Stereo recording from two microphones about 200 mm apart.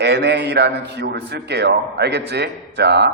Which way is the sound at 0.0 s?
55° right (ahead or behind).